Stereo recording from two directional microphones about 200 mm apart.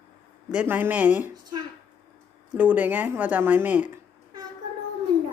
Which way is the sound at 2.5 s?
10° right (ahead or behind).